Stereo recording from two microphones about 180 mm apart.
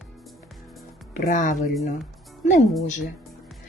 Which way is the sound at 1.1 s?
45° left (ahead or behind).